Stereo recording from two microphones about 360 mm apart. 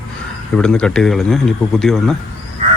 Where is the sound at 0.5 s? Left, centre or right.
Centre.